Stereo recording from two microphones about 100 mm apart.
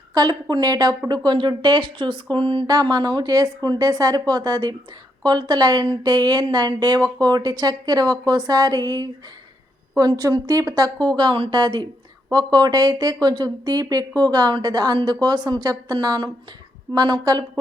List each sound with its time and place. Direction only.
0.1 s speech: 40° right (ahead or behind)
2.6 s speech: 40° right (ahead or behind)
10.1 s speech: 45° right (ahead or behind)